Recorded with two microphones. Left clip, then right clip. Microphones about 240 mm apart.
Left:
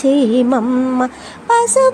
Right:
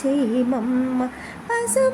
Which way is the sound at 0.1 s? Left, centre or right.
Centre.